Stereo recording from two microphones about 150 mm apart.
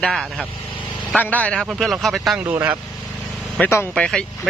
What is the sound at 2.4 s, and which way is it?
Speech, 15° right (ahead or behind).